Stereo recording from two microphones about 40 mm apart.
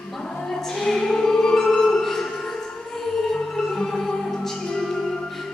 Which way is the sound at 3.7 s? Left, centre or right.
Centre.